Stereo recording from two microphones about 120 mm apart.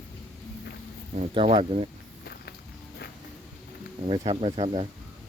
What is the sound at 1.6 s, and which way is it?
Speech, 60° right (ahead or behind).